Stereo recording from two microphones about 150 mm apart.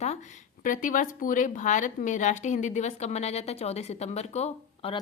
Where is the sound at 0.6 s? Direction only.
60° left (ahead or behind).